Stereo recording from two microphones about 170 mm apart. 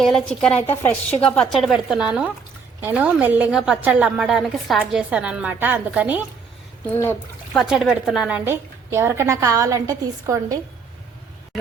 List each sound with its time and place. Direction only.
0.0 s a woman's voice: 5° left (ahead or behind)
6.9 s speech: 10° left (ahead or behind)
7.6 s a woman's voice: centre (ahead or behind); by 10.6 s 20° right (ahead or behind)